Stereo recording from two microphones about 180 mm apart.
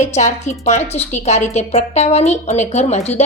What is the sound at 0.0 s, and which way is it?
A woman's voice, 40° left (ahead or behind).